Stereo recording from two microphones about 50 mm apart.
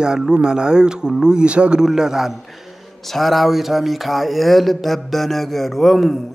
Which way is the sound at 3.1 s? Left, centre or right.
Centre.